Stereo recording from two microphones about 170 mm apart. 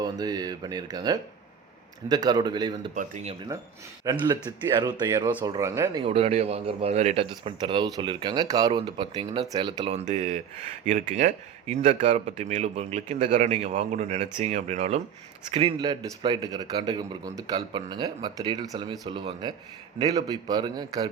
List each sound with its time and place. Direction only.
0.0 s a man's voice: 20° right (ahead or behind)
2.9 s speech: 45° right (ahead or behind)
4.0 s a man's voice: 25° right (ahead or behind)
6.0 s a man's voice: 35° right (ahead or behind)
9.9 s a man's voice: 40° right (ahead or behind)
15.5 s a man's voice: 30° right (ahead or behind)